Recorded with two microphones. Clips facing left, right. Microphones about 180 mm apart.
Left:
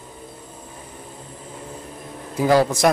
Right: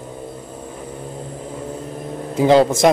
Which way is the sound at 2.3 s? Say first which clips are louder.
Right 4 dB; 25° right (ahead or behind).